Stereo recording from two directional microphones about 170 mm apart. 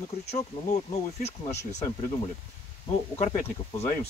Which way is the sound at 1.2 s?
40° left (ahead or behind).